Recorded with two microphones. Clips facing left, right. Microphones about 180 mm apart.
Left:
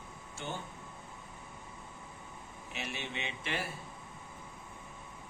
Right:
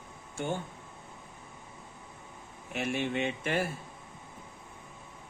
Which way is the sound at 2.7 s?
50° right (ahead or behind).